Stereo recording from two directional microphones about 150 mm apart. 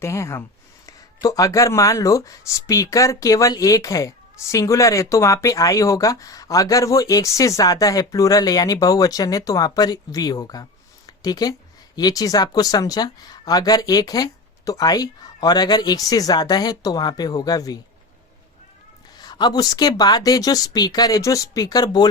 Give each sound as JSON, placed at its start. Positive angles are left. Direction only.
{"t": 0.0, "sound": "speech", "side_deg": 20}
{"t": 19.2, "sound": "speech", "side_deg": 30}